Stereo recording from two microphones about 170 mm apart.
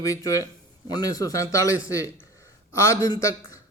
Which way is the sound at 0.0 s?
20° left (ahead or behind).